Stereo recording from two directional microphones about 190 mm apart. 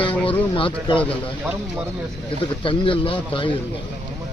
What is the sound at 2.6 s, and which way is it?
Speech, 25° left (ahead or behind).